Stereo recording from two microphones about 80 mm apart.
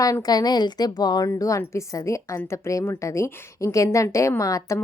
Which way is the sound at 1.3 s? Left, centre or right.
Left.